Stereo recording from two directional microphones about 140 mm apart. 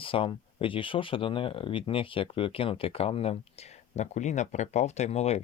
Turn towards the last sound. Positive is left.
turn(degrees=50)  # may be behind; listen again after turning